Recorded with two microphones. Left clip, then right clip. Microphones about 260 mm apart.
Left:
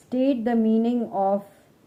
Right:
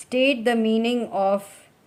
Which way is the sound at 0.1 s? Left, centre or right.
Right.